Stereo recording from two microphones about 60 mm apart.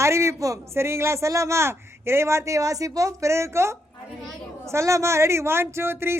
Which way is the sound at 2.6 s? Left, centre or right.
Right.